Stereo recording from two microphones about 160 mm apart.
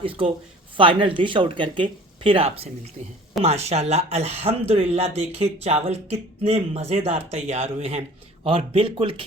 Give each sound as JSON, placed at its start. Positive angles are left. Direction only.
{"t": 0.0, "sound": "speech", "side_deg": -35}